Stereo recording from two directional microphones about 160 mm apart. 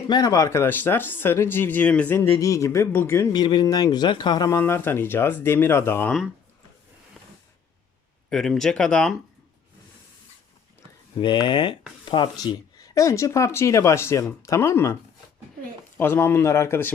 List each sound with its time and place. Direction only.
0.1 s speech: 20° left (ahead or behind)
3.3 s speech: 25° left (ahead or behind)
8.3 s speech: 5° left (ahead or behind)
11.2 s speech: 30° left (ahead or behind)
16.0 s speech: 15° left (ahead or behind)